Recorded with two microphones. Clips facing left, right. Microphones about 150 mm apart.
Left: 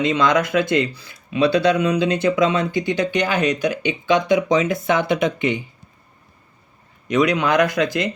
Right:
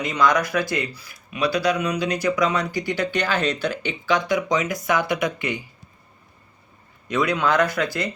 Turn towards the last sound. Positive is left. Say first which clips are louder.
# left 3 dB
turn(degrees=20)  # may be behind; listen again after turning